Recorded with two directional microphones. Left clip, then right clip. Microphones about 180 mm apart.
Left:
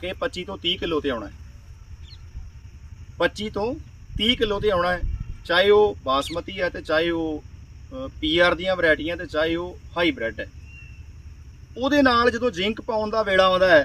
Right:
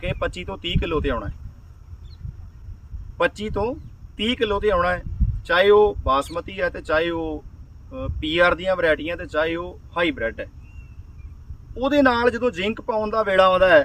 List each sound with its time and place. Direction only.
0.0 s speech: 5° right (ahead or behind)
3.4 s speech: 5° right (ahead or behind)
11.7 s speech: 5° right (ahead or behind)